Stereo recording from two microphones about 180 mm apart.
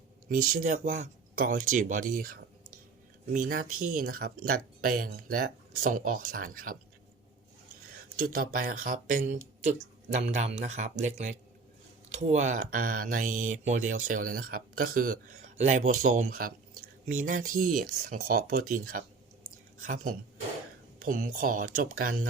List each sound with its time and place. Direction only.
0.3 s speech: 50° right (ahead or behind)
8.2 s speech: 55° right (ahead or behind)